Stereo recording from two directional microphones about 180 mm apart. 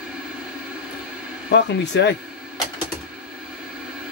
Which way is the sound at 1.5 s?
80° left.